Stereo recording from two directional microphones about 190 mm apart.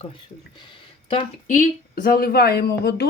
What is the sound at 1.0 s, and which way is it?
Speech, 35° left (ahead or behind).